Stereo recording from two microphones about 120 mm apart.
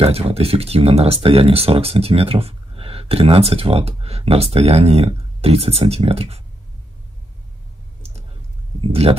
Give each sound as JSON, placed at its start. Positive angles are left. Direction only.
{"t": 0.0, "sound": "speech", "side_deg": -55}